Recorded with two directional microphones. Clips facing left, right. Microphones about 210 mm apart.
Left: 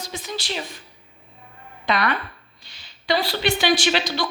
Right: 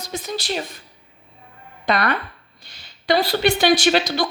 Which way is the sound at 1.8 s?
40° right (ahead or behind).